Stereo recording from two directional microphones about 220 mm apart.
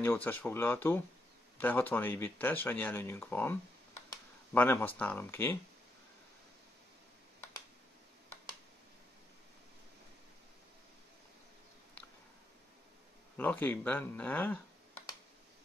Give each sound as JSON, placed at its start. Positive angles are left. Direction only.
{"t": 0.0, "sound": "speech", "side_deg": 10}
{"t": 4.6, "sound": "speech", "side_deg": 10}
{"t": 13.4, "sound": "speech", "side_deg": 10}